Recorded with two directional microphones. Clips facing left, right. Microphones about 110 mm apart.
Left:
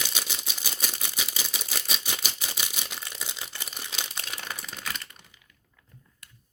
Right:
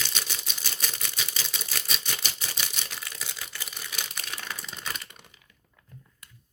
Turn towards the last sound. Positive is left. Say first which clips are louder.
# even
turn(degrees=5)  # may be behind; listen again after turning